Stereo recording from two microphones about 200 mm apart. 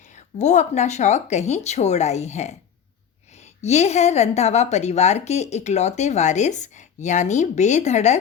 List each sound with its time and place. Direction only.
0.3 s a woman's voice: 35° left (ahead or behind)
3.6 s a woman's voice: 35° left (ahead or behind)